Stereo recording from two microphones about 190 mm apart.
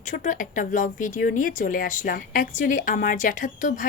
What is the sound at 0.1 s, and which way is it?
A woman's voice, 45° left (ahead or behind).